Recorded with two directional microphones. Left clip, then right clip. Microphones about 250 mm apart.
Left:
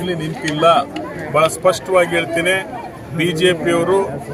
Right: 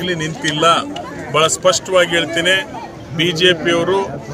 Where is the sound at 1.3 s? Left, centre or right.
Centre.